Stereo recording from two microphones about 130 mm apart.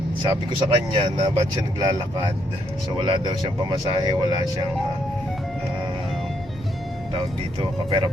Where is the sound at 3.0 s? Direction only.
35° right (ahead or behind).